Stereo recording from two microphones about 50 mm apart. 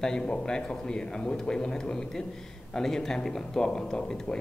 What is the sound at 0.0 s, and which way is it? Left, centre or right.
A man's voice, centre.